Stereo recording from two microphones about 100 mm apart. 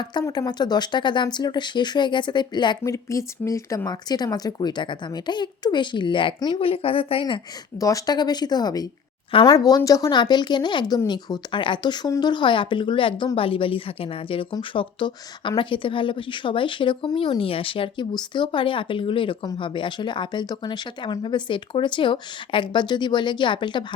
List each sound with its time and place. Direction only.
0.0 s speech: 50° left (ahead or behind)
2.8 s speech: 30° left (ahead or behind); by 7.4 s 55° left (ahead or behind)
7.8 s speech: 35° left (ahead or behind); by 18.0 s 60° left (ahead or behind)
18.1 s speech: 50° left (ahead or behind)